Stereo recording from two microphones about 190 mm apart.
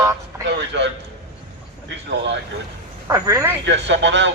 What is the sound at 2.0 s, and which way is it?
Speech, 65° right (ahead or behind).